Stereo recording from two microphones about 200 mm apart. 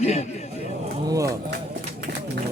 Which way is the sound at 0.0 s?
35° left (ahead or behind).